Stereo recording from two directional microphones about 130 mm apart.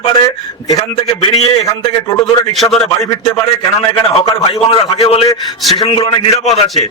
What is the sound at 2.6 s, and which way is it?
Speech, 25° left (ahead or behind).